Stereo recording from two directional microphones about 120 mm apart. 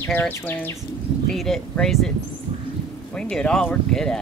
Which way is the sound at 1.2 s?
Centre (ahead or behind).